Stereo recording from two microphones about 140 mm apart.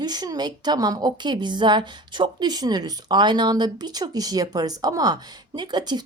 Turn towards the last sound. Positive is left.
turn(degrees=-30)  # may be behind; listen again after turning